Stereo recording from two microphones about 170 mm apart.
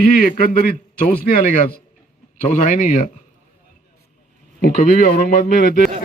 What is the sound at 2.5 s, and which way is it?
Speech, 45° left (ahead or behind).